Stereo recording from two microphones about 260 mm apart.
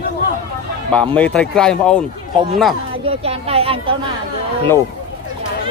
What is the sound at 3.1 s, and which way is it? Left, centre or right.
Speech, right.